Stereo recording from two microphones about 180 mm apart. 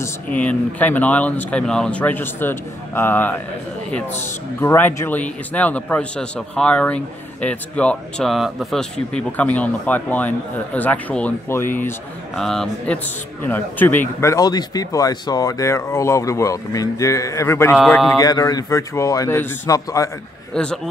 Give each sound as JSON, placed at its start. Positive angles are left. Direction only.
{"t": 0.0, "sound": "a man's voice", "side_deg": 10}
{"t": 12.4, "sound": "a man's voice", "side_deg": 0}
{"t": 17.7, "sound": "mantra", "side_deg": 0}
{"t": 18.1, "sound": "a man's voice", "side_deg": 20}
{"t": 20.5, "sound": "mantra", "side_deg": 5}